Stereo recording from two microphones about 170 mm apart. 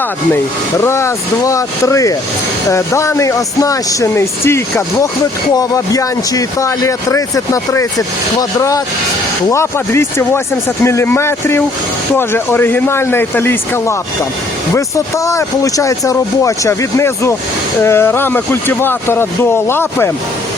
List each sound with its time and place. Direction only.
0.8 s speech: 15° left (ahead or behind)